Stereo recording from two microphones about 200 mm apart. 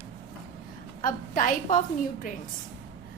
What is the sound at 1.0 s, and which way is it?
Speech, 40° left (ahead or behind).